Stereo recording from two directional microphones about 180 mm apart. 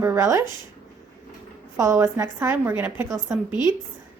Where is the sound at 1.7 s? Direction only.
15° right (ahead or behind).